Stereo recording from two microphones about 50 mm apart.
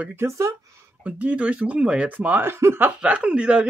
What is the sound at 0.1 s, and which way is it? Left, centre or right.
Speech, right.